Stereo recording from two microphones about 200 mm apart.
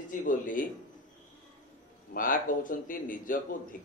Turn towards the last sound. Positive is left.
turn(degrees=40)  # may be behind; listen again after turning